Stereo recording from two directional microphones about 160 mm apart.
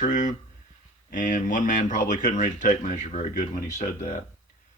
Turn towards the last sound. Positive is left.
turn(degrees=50)  # may be behind; listen again after turning